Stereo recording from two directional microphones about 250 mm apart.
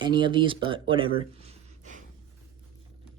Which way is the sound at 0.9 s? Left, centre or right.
Right.